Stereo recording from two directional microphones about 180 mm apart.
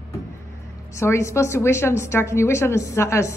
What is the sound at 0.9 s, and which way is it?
A woman's voice, 15° left (ahead or behind).